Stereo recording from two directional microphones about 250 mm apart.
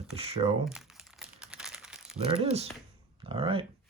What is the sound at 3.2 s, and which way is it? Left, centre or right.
Speech, right.